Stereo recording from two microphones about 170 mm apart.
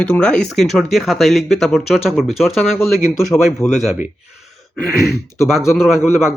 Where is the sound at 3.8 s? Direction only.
Centre (ahead or behind).